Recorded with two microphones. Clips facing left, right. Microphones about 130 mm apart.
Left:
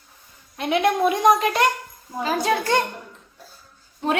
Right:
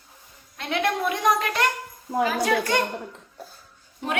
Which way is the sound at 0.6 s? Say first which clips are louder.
Left 5 dB; 15° left (ahead or behind).